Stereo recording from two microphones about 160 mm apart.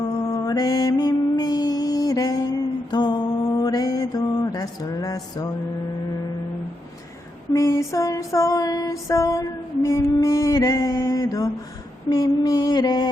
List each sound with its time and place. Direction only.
0.3 s music: 20° left (ahead or behind)
7.5 s female singing: 20° left (ahead or behind)